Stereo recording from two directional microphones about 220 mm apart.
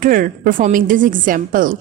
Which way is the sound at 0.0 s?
40° right (ahead or behind).